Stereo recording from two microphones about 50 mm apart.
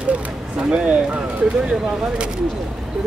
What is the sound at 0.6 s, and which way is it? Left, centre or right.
Speech, right.